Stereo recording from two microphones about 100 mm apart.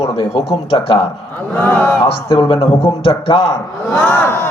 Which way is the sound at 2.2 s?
30° left (ahead or behind).